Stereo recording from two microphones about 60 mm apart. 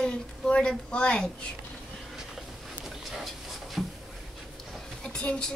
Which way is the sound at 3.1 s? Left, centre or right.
Centre.